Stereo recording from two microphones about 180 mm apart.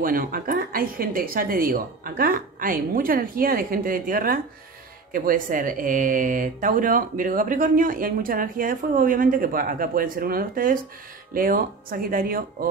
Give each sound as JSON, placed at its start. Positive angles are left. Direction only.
{"t": 0.0, "sound": "speech", "side_deg": -50}